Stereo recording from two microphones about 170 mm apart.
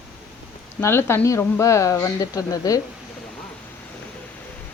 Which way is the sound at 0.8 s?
15° left (ahead or behind).